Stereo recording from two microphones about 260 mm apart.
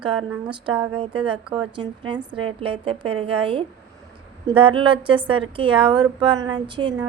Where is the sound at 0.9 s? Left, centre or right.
Centre.